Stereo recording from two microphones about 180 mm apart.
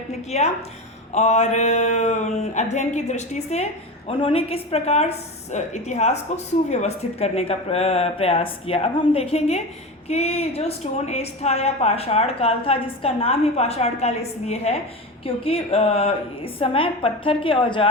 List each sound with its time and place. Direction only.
0.1 s a woman's voice: 35° left (ahead or behind)